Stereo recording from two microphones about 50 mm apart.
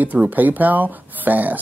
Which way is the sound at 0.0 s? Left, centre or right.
Right.